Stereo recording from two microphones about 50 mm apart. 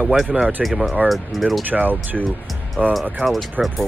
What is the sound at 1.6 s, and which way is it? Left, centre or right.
Speech, right.